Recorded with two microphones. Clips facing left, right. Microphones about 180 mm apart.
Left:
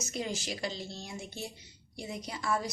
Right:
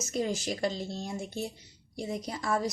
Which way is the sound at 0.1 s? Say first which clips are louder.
Right 6 dB; 45° right (ahead or behind).